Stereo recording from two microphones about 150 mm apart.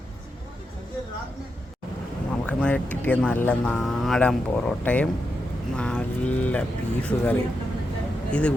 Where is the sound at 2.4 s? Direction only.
10° left (ahead or behind).